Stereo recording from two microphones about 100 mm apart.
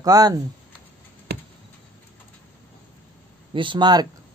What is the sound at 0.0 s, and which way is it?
Speech, 35° right (ahead or behind).